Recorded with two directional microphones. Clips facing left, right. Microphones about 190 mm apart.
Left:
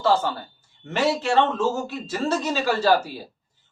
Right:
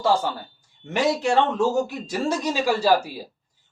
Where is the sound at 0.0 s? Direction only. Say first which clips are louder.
Left 1 dB; 15° right (ahead or behind).